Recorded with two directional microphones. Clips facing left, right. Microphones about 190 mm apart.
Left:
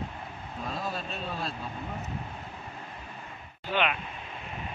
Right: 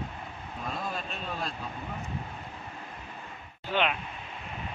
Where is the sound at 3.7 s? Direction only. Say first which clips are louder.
Even; 5° left (ahead or behind).